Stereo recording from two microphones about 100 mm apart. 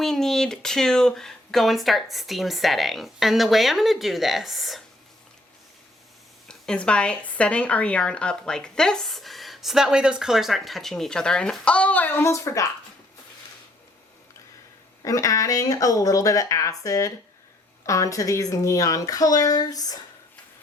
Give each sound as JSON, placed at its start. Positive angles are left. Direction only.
{"t": 0.0, "sound": "speech", "side_deg": 5}
{"t": 6.5, "sound": "speech", "side_deg": 10}
{"t": 15.0, "sound": "speech", "side_deg": 35}